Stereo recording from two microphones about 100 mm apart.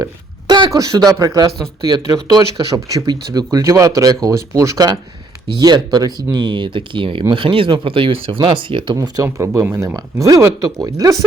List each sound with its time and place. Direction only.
0.4 s a sound: 50° right (ahead or behind)
0.7 s speech: 35° right (ahead or behind); by 9.0 s 60° right (ahead or behind)
9.0 s speech: 35° right (ahead or behind)
9.9 s speech: 35° right (ahead or behind)